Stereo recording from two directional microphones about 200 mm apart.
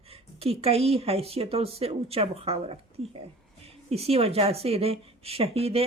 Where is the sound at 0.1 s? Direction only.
30° right (ahead or behind).